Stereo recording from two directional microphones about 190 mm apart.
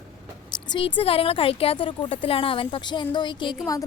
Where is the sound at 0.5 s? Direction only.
25° left (ahead or behind).